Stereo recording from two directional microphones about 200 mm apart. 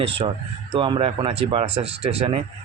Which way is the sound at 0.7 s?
25° right (ahead or behind).